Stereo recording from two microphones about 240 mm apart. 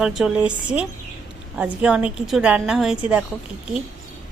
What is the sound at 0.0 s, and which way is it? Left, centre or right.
A woman's voice, centre.